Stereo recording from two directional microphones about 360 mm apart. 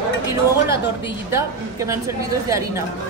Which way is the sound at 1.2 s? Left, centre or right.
Centre.